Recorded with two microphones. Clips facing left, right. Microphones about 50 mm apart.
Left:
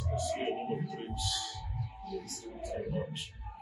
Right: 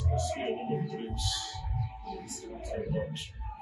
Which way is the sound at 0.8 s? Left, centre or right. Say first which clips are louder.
Right 2 dB; centre.